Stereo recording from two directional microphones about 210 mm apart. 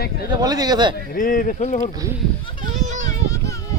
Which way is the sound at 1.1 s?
40° left (ahead or behind).